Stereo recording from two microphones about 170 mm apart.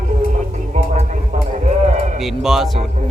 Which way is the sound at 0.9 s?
45° right (ahead or behind).